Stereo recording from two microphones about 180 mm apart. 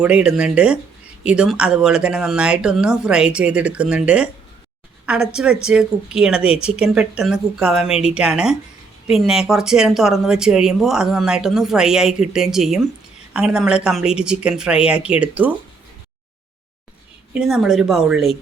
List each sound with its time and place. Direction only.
0.0 s speech: 5° right (ahead or behind)
17.3 s speech: 5° right (ahead or behind)